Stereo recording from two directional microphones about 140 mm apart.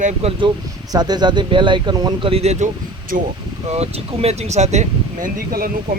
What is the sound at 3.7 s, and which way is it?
Speech, 50° right (ahead or behind).